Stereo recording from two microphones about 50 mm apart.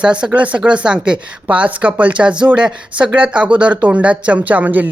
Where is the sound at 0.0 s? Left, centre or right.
Right.